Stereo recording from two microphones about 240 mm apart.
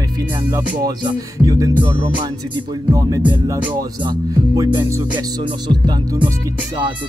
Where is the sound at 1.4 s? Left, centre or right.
Centre.